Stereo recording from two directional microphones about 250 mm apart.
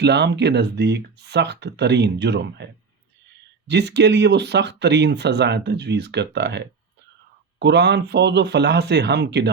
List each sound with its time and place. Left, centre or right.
0.0 s speech: right
3.7 s speech: right
7.6 s speech: right